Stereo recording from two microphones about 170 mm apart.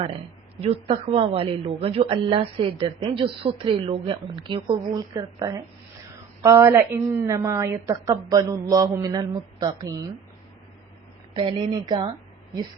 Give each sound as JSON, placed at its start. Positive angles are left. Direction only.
{"t": 0.6, "sound": "a woman's voice", "side_deg": -35}
{"t": 11.3, "sound": "a woman's voice", "side_deg": -30}